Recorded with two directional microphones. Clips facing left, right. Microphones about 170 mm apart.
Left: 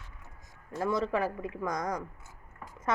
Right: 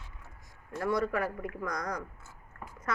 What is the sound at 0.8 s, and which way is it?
Speech, 20° left (ahead or behind).